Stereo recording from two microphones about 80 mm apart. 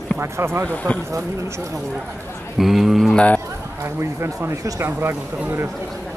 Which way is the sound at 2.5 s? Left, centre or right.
Centre.